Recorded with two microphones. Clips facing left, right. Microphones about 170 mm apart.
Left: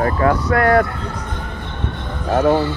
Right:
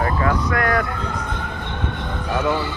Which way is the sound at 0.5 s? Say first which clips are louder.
Left 9 dB; 30° left (ahead or behind).